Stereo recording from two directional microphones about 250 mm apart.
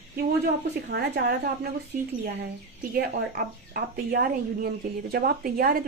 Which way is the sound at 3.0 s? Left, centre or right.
Right.